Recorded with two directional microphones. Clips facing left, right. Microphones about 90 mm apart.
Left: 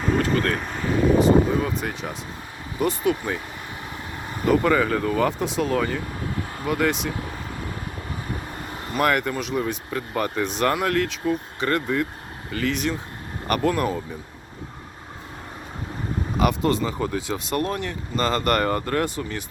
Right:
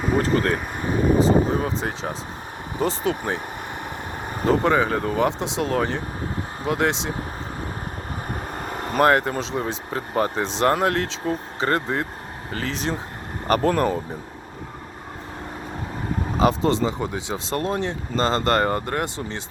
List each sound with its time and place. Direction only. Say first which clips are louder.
0.2 s speech: right 1 dB; 30° right (ahead or behind)
0.5 s speech: right 1 dB; 20° right (ahead or behind)
1.5 s speech: even; 35° right (ahead or behind)
4.4 s speech: even; 25° right (ahead or behind)
8.5 s vehicle: right 5 dB; 55° right (ahead or behind)
9.0 s speech: right 2 dB; 30° right (ahead or behind)
16.4 s speech: right 2 dB; 30° right (ahead or behind)